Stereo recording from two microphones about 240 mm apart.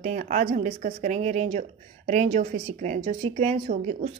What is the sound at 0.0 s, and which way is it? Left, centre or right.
A woman's voice, right.